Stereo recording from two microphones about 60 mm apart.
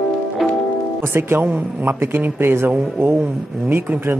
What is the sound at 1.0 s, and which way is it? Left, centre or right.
Speech, right.